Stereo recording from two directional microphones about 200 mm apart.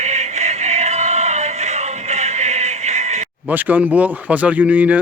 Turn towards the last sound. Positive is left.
turn(degrees=-5)  # may be behind; listen again after turning